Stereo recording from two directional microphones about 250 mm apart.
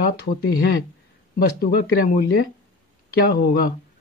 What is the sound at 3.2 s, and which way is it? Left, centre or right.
Speech, left.